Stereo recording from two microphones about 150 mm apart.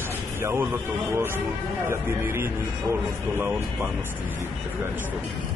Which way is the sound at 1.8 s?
15° right (ahead or behind).